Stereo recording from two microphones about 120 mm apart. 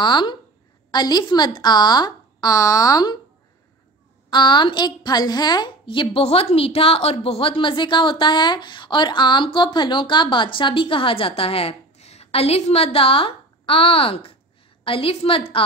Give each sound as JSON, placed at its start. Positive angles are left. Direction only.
{"t": 0.0, "sound": "speech", "side_deg": 40}
{"t": 4.3, "sound": "a woman's voice", "side_deg": 40}